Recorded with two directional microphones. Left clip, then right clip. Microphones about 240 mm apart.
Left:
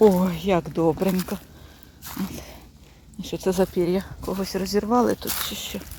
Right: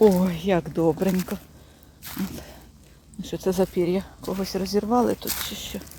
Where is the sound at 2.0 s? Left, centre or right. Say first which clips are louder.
Even; centre.